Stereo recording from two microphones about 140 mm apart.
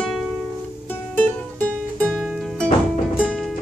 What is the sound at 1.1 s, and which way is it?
Music, 10° left (ahead or behind).